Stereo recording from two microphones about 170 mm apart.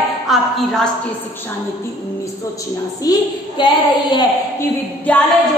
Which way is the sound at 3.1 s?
20° left (ahead or behind).